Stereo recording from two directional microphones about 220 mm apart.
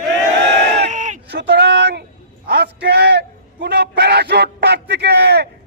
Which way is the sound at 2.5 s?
50° right (ahead or behind).